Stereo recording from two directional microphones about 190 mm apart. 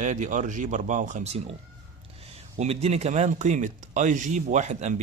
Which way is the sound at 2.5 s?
35° right (ahead or behind).